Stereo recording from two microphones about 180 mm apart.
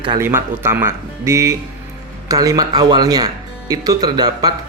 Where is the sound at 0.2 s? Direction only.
15° right (ahead or behind).